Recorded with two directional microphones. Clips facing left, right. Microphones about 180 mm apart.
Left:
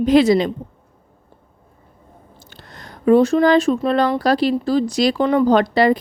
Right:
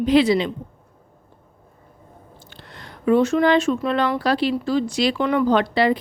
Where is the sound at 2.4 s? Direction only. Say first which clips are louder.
Left 2 dB; 40° left (ahead or behind).